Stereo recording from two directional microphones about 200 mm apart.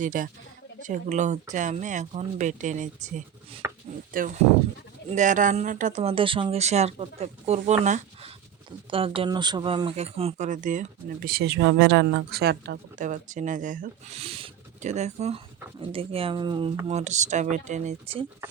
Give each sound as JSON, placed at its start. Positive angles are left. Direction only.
{"t": 0.0, "sound": "speech", "side_deg": -40}
{"t": 13.0, "sound": "speech", "side_deg": -40}
{"t": 16.9, "sound": "speech", "side_deg": -35}